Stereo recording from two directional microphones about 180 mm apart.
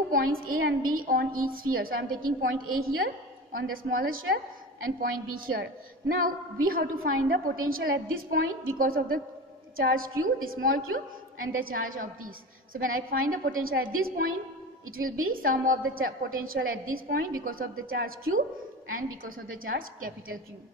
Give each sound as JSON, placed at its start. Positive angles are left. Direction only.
{"t": 0.1, "sound": "a woman's voice", "side_deg": -55}